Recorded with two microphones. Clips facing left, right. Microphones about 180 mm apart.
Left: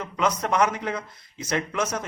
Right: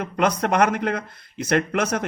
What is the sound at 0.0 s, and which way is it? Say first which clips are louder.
A man's voice: right 4 dB; 60° right (ahead or behind).